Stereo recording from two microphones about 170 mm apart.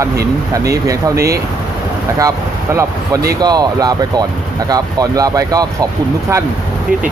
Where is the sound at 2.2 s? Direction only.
20° right (ahead or behind).